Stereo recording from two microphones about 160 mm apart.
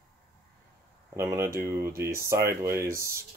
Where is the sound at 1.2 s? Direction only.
15° right (ahead or behind).